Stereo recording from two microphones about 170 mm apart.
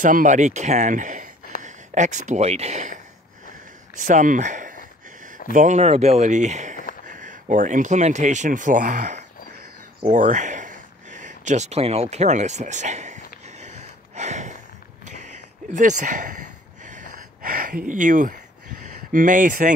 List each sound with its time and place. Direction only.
0.0 s speech: 50° right (ahead or behind)
10.0 s a sound: 45° right (ahead or behind)
17.8 s speech: 50° right (ahead or behind)